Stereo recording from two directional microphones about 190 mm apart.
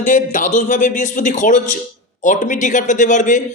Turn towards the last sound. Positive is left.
turn(degrees=40)  # may be behind; listen again after turning